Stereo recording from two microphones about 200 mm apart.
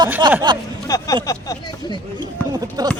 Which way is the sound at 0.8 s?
20° left (ahead or behind).